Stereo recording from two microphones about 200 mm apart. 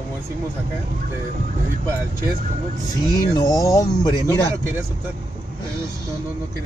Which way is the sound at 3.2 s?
20° left (ahead or behind).